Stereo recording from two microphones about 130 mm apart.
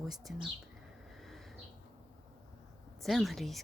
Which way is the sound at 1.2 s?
Centre (ahead or behind).